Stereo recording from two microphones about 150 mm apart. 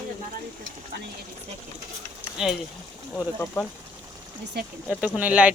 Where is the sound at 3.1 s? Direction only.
10° left (ahead or behind).